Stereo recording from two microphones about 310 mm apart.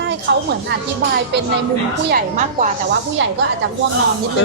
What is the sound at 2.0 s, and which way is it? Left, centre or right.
Speech, right.